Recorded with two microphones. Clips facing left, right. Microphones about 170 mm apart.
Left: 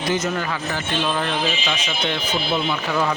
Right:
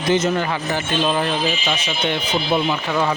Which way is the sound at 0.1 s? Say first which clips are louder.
Right 5 dB; 30° right (ahead or behind).